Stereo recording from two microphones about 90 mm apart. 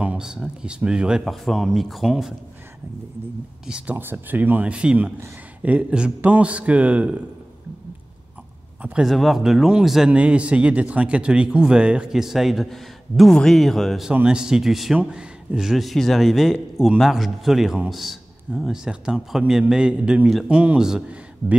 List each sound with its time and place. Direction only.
0.0 s speech: 10° right (ahead or behind)
1.2 s a man's voice: centre (ahead or behind)
3.6 s speech: 10° right (ahead or behind)
3.9 s speech: 25° right (ahead or behind)
9.0 s a man's voice: centre (ahead or behind)
14.1 s a man's voice: 10° right (ahead or behind)